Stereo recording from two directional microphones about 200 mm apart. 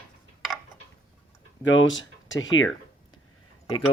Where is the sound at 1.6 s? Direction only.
70° left (ahead or behind).